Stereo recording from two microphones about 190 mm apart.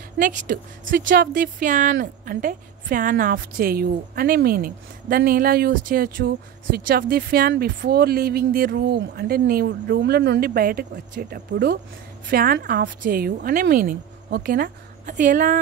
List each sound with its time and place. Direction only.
0.2 s speech: 40° right (ahead or behind)